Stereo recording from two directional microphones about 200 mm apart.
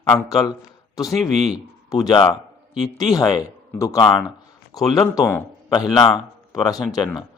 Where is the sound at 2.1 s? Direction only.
25° left (ahead or behind).